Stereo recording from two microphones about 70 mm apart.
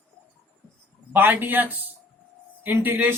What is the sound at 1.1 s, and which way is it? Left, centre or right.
A man's voice, right.